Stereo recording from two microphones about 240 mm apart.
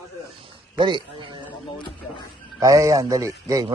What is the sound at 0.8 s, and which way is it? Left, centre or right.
Speech, centre.